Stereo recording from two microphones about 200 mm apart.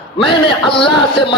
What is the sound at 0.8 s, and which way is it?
Speech, 25° left (ahead or behind).